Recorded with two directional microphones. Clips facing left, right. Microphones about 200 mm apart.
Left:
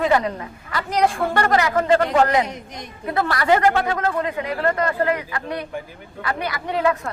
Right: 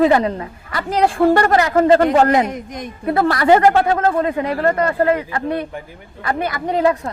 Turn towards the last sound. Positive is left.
turn(degrees=-40)  # may be behind; listen again after turning